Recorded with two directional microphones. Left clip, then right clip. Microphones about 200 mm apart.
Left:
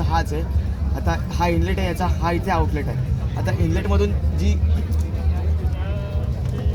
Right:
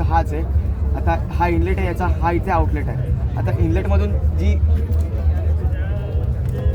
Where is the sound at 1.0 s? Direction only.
25° left (ahead or behind).